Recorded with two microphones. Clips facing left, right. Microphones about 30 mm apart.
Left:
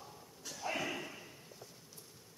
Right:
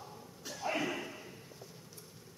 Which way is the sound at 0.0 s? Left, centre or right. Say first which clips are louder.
Right 3 dB; centre.